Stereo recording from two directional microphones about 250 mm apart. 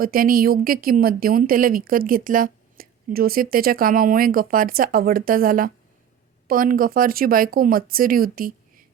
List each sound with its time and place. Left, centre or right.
0.0 s a woman's voice: right